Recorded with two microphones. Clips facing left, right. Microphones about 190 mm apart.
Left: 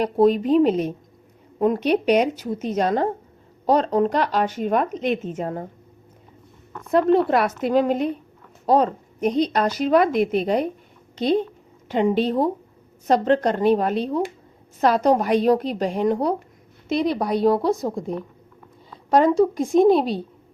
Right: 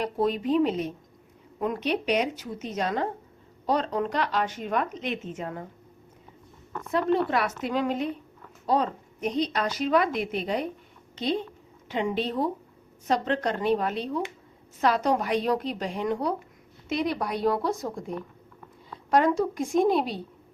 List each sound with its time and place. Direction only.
0.0 s a woman's voice: 40° left (ahead or behind)
2.3 s a woman's voice: 35° left (ahead or behind)
6.9 s a woman's voice: 45° left (ahead or behind)
11.1 s a sound: 45° left (ahead or behind)
11.9 s a woman's voice: 40° left (ahead or behind)
19.1 s a woman's voice: 30° left (ahead or behind)